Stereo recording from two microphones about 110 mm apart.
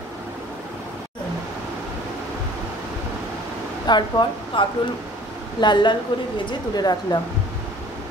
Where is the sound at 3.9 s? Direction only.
40° left (ahead or behind).